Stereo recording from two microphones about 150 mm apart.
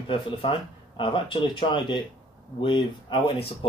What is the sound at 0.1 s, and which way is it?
Speech, 35° left (ahead or behind).